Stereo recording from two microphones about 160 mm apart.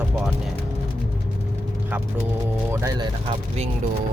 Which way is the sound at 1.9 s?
10° right (ahead or behind).